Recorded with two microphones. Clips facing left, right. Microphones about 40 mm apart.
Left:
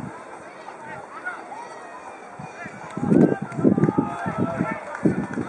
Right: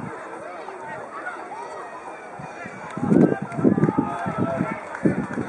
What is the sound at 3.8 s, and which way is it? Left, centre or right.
Run, centre.